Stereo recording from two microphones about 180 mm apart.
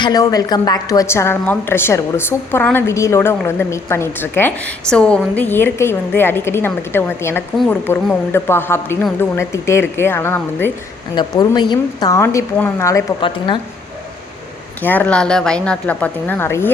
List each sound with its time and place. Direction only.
0.0 s a woman's voice: 20° left (ahead or behind)
11.1 s a woman's voice: 25° left (ahead or behind)
13.2 s a woman's voice: 25° left (ahead or behind)
14.8 s a woman's voice: 10° left (ahead or behind)